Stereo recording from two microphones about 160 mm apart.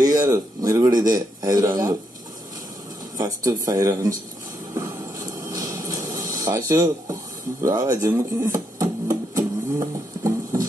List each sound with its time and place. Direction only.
0.0 s a man's voice: 20° right (ahead or behind)
3.2 s a man's voice: 25° right (ahead or behind)
4.7 s a sound: 25° right (ahead or behind)
7.6 s music: 20° right (ahead or behind)